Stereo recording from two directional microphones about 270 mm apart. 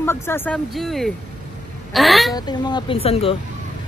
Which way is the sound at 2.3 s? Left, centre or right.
Centre.